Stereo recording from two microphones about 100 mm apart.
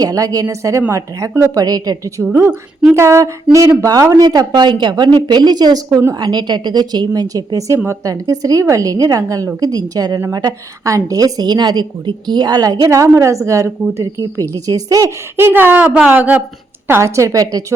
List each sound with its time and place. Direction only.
0.0 s a woman's voice: 35° right (ahead or behind)
1.5 s a woman's voice: 40° right (ahead or behind)
15.4 s speech: 20° right (ahead or behind)
16.8 s a woman's voice: 25° right (ahead or behind)